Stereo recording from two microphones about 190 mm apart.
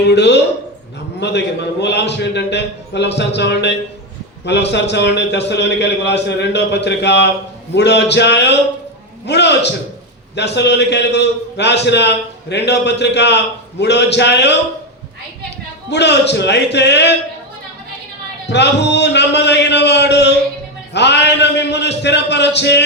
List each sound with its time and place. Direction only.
0.1 s a man's voice: 65° left (ahead or behind)
15.9 s a man's voice: 65° left (ahead or behind)
18.4 s a man's voice: 65° left (ahead or behind)